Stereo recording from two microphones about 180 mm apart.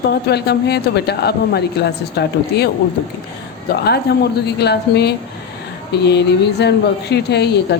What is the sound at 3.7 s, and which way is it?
A woman's voice, 60° left (ahead or behind).